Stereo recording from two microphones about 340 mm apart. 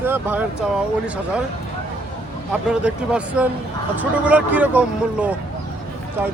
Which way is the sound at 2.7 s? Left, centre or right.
Centre.